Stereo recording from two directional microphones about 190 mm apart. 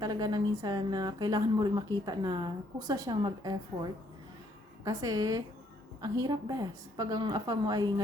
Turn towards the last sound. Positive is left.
turn(degrees=-20)  # may be behind; listen again after turning